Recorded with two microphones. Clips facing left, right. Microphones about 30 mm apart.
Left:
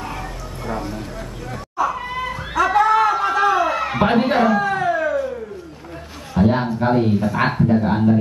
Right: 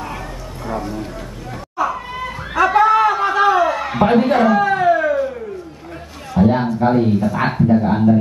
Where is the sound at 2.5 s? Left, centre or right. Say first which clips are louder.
Right 3 dB; centre.